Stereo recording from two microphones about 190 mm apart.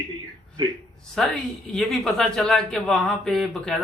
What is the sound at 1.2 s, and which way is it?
Speech, centre (ahead or behind).